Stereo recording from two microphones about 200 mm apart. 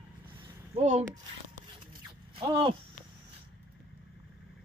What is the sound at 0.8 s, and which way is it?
Speech, 35° right (ahead or behind).